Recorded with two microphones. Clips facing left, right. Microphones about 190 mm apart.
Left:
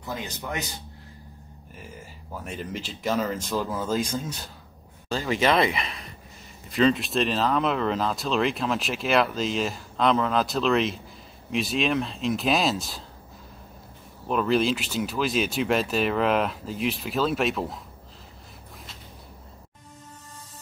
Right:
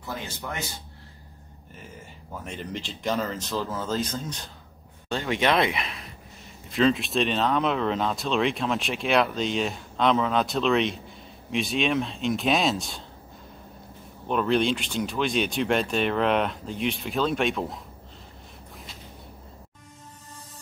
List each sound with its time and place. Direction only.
0.1 s speech: 15° left (ahead or behind)
2.4 s speech: 5° left (ahead or behind)
14.2 s speech: centre (ahead or behind)